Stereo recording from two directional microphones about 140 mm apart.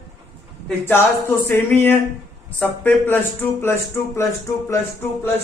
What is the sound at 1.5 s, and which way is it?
A man's voice, 15° left (ahead or behind).